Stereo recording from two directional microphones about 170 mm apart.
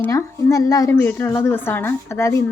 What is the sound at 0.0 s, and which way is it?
Speech, 15° left (ahead or behind).